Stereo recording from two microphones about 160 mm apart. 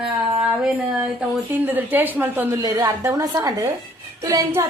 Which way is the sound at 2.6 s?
20° right (ahead or behind).